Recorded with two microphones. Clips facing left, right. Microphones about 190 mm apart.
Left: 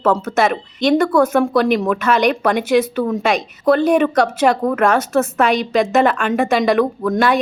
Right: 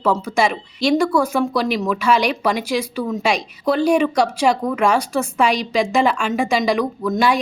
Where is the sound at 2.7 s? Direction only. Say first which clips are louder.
Left 7 dB; 55° left (ahead or behind).